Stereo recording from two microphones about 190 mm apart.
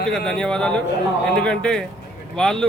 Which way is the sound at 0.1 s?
5° left (ahead or behind).